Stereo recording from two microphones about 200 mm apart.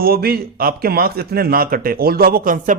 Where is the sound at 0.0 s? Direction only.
50° right (ahead or behind).